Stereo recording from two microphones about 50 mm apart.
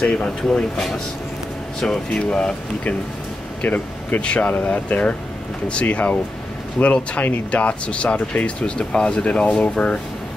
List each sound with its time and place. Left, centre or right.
0.7 s speech: centre; by 3.0 s left
3.6 s speech: left; by 9.9 s centre